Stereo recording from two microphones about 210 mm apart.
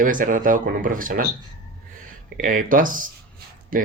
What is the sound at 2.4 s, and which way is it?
Speech, 40° right (ahead or behind).